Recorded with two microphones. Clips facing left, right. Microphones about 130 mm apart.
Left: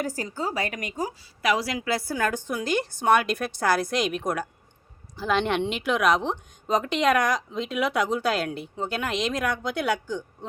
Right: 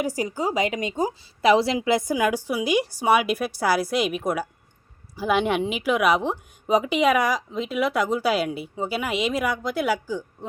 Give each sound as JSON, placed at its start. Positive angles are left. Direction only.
{"t": 0.0, "sound": "a woman's voice", "side_deg": -15}